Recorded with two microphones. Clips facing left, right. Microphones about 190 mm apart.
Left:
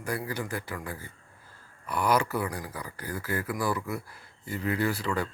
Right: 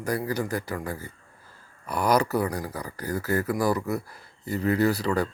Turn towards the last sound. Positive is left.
turn(degrees=-40)  # may be behind; listen again after turning